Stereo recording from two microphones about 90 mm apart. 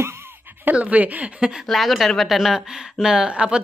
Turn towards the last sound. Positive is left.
turn(degrees=-10)  # may be behind; listen again after turning